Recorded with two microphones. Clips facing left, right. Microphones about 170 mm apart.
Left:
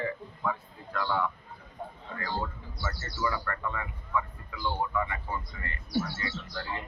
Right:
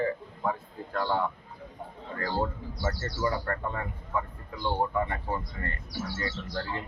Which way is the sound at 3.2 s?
40° right (ahead or behind).